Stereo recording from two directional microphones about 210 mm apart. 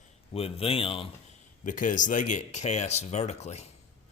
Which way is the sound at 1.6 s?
40° left (ahead or behind).